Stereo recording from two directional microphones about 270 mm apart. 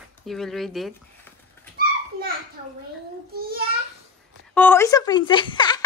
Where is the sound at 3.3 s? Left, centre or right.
Right.